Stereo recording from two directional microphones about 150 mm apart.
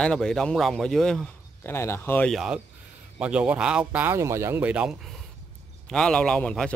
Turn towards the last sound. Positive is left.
turn(degrees=5)  # may be behind; listen again after turning